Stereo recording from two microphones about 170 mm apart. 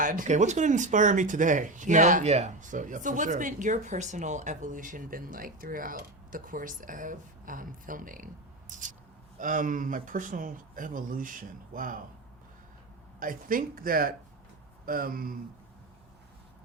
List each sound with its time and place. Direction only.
0.0 s speech: 50° right (ahead or behind)
13.1 s speech: 55° right (ahead or behind)